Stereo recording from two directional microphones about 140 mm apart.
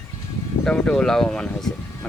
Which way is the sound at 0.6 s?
5° left (ahead or behind).